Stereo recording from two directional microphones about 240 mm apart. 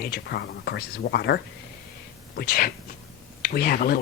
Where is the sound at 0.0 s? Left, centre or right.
Left.